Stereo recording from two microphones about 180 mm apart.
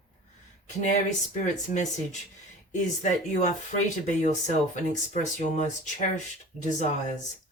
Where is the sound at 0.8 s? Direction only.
40° left (ahead or behind).